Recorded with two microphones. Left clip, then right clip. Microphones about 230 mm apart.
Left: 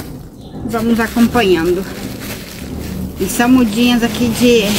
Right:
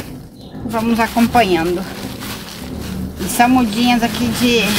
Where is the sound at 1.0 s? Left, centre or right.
Right.